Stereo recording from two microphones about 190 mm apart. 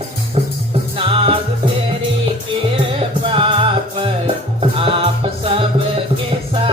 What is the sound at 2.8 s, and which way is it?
Music, 25° right (ahead or behind).